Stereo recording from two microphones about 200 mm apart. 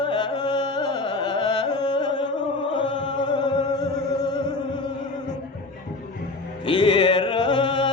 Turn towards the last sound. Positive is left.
turn(degrees=25)  # may be behind; listen again after turning